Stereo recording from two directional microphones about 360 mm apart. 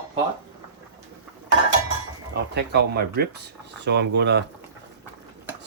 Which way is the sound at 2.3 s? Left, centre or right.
Right.